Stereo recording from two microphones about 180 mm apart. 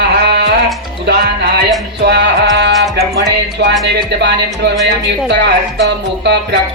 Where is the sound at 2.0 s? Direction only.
70° right (ahead or behind).